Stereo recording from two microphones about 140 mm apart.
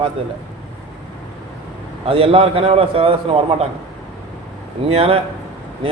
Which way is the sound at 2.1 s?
40° right (ahead or behind).